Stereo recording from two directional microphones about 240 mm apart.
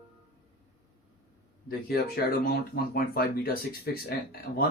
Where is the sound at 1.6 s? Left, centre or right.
Left.